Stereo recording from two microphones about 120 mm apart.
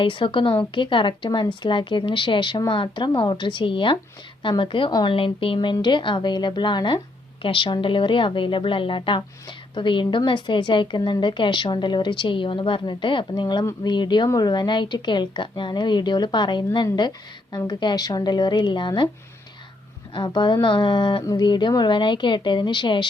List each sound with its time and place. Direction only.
0.0 s a woman's voice: 45° left (ahead or behind)
4.9 s a woman's voice: 35° left (ahead or behind)
5.1 s a woman's voice: 50° left (ahead or behind)
20.1 s a woman's voice: 40° left (ahead or behind)